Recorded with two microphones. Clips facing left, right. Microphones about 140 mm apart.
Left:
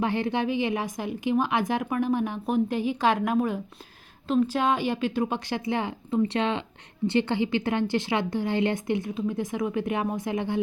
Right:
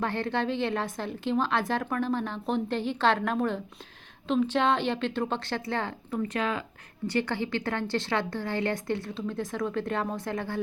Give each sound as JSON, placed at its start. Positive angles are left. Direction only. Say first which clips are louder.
{"t": 0.0, "sound": "a woman's voice", "louder": "left 3 dB", "side_deg": 15}